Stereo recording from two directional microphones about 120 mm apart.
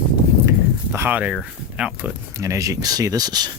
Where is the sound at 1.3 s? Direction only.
10° right (ahead or behind).